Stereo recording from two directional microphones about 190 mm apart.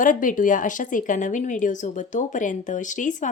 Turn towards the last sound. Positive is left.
turn(degrees=40)  # may be behind; listen again after turning